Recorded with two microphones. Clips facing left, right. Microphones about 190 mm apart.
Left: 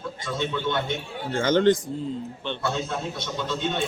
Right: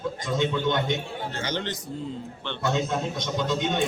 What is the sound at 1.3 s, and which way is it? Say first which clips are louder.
Speech: left 14 dB; 50° left (ahead or behind).